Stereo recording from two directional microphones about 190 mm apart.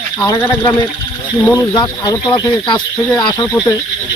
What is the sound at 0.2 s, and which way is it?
Speech, 15° left (ahead or behind).